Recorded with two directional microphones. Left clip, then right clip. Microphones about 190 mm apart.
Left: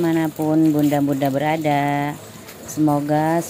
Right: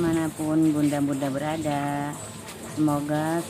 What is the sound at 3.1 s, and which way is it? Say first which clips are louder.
Speech: left 8 dB; 30° left (ahead or behind).